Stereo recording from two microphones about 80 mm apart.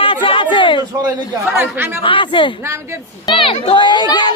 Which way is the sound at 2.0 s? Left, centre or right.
Left.